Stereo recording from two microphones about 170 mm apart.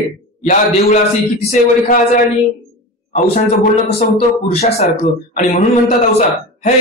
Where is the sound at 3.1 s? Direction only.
40° left (ahead or behind).